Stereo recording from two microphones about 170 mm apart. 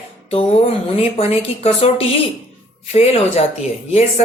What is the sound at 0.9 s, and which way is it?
A woman's voice, 35° left (ahead or behind).